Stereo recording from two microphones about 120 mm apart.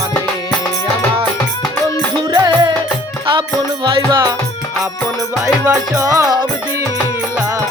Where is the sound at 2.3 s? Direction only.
35° right (ahead or behind).